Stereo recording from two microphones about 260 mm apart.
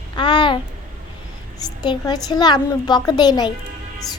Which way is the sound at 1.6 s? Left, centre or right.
Centre.